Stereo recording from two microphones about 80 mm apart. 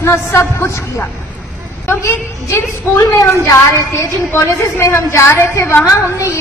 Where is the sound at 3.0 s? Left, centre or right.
Left.